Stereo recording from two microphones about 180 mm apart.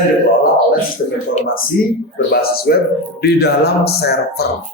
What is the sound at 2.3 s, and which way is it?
Speech, 55° left (ahead or behind).